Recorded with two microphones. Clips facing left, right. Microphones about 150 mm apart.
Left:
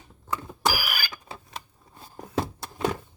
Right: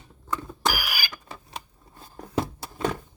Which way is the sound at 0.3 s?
10° left (ahead or behind).